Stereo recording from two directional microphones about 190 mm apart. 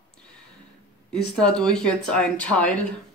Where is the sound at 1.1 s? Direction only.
5° left (ahead or behind).